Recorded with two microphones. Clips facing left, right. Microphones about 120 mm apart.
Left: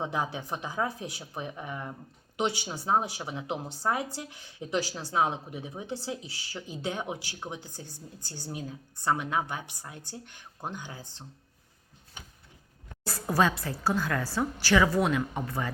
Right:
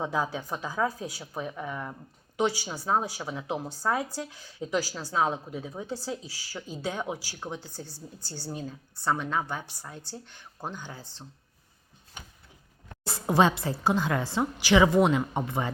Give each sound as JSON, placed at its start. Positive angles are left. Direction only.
{"t": 0.0, "sound": "a woman's voice", "side_deg": 20}
{"t": 13.1, "sound": "a woman's voice", "side_deg": -25}